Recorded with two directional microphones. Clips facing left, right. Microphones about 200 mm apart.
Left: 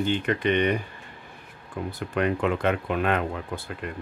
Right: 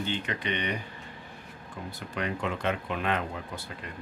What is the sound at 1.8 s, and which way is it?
Speech, 55° left (ahead or behind).